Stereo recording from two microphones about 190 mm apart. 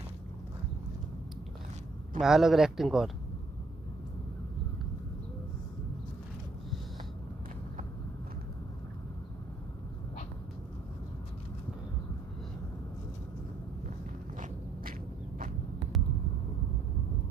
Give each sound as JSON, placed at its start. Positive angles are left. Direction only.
{"t": 2.1, "sound": "speech", "side_deg": 0}
{"t": 14.3, "sound": "walk", "side_deg": -40}